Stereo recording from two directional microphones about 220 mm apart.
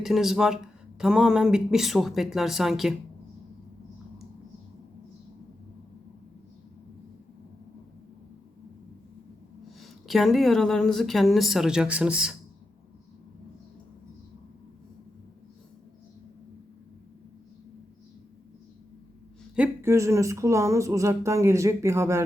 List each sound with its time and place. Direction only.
0.0 s speech: centre (ahead or behind)
9.6 s speech: centre (ahead or behind)
19.5 s speech: 10° right (ahead or behind)